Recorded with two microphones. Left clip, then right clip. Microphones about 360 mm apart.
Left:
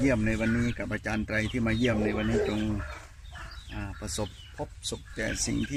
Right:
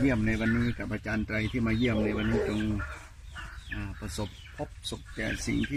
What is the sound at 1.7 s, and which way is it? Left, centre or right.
Speech, left.